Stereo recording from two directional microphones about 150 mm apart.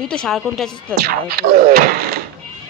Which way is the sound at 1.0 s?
90° right.